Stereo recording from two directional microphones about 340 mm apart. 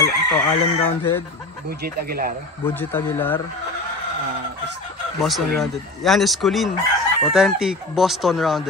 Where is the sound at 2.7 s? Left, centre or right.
Centre.